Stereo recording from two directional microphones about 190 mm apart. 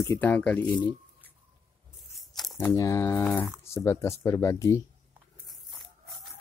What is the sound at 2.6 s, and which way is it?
Speech, 15° left (ahead or behind).